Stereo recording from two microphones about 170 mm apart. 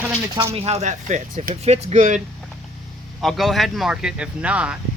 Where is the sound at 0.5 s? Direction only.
35° right (ahead or behind).